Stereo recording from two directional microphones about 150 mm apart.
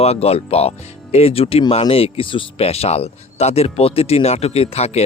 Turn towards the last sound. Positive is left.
turn(degrees=45)  # may be behind; listen again after turning